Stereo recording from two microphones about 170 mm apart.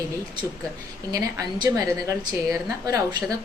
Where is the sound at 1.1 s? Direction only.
25° right (ahead or behind).